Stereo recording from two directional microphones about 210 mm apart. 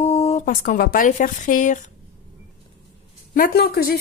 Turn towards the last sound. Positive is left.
turn(degrees=45)  # may be behind; listen again after turning